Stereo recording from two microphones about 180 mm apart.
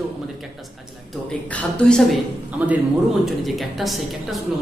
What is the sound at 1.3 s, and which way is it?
Speech, 5° left (ahead or behind).